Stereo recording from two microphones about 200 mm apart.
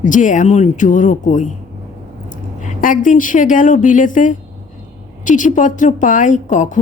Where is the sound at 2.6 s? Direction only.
40° left (ahead or behind).